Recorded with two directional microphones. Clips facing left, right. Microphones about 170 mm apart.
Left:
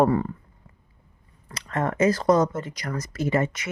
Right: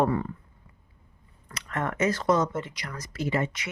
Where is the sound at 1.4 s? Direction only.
30° left (ahead or behind).